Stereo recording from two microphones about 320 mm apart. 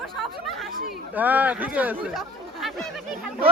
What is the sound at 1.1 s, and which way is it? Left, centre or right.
Speech, centre.